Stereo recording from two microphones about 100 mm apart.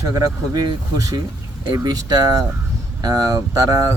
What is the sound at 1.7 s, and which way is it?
Speech, 40° right (ahead or behind).